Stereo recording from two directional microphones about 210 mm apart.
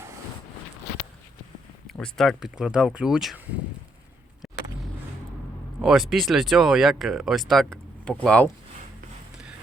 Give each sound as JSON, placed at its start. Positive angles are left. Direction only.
{"t": 1.9, "sound": "speech", "side_deg": 0}
{"t": 4.4, "sound": "vehicle", "side_deg": 0}
{"t": 5.8, "sound": "speech", "side_deg": 0}